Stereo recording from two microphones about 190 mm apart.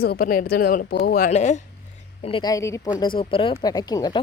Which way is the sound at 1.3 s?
40° left (ahead or behind).